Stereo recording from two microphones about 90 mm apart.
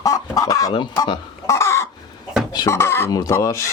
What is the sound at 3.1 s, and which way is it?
Speech, 40° left (ahead or behind).